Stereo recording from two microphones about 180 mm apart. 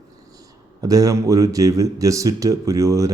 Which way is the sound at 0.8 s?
20° right (ahead or behind).